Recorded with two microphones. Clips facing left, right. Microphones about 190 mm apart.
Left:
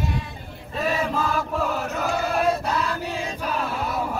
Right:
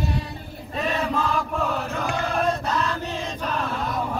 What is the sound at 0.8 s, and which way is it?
Chant, 5° left (ahead or behind).